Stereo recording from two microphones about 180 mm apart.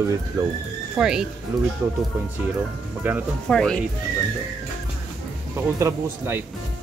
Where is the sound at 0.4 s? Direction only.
20° right (ahead or behind).